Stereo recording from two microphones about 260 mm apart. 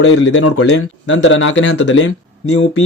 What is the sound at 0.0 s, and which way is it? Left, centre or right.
Speech, left.